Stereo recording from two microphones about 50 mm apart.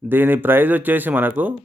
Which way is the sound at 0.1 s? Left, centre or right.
Right.